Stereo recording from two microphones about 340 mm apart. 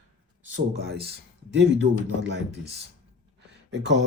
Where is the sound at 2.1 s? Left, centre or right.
Right.